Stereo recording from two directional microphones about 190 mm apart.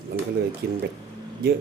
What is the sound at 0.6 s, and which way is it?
Speech, 60° right (ahead or behind).